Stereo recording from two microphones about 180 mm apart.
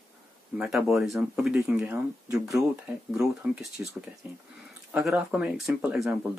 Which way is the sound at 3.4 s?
10° right (ahead or behind).